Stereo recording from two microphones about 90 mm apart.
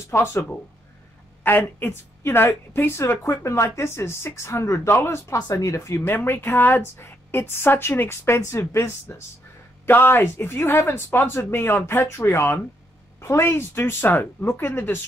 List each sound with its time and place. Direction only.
0.1 s a woman's voice: 30° left (ahead or behind)
6.1 s a woman's voice: 25° left (ahead or behind)